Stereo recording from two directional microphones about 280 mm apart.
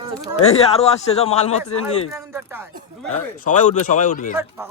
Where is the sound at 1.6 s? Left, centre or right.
Left.